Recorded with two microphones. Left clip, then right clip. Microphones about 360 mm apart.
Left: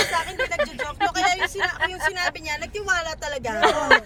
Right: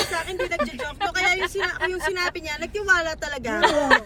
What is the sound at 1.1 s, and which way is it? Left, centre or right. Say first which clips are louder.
Speech: right 2 dB; centre.